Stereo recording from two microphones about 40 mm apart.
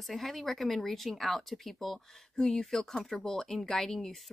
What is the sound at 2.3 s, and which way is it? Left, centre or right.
Speech, centre.